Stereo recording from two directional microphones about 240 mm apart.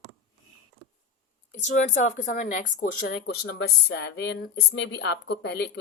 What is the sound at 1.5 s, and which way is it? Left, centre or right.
Speech, left.